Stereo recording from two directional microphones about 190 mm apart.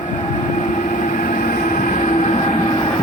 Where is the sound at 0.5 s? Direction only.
40° left (ahead or behind).